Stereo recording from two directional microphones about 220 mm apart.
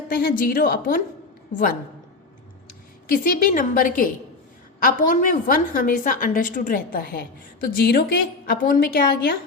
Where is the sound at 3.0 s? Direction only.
40° left (ahead or behind).